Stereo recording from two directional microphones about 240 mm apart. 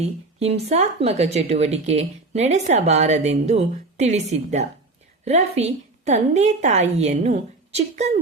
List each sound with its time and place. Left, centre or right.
0.0 s speech: right